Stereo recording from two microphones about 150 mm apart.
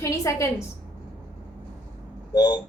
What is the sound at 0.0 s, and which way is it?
Speech, 20° left (ahead or behind).